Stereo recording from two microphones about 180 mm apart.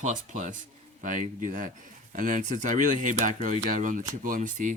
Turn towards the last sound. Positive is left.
turn(degrees=-45)  # may be behind; listen again after turning